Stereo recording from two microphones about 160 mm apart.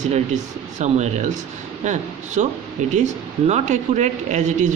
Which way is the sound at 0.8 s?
45° right (ahead or behind).